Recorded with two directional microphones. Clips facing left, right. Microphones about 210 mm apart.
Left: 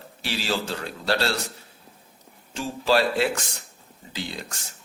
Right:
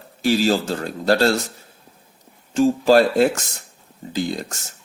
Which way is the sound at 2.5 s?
45° right (ahead or behind).